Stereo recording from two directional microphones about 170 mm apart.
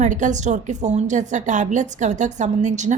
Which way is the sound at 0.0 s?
45° right (ahead or behind).